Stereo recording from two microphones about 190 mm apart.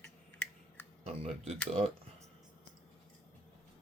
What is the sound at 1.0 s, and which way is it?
Speech, 35° right (ahead or behind).